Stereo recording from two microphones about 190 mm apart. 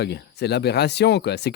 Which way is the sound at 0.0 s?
60° left (ahead or behind).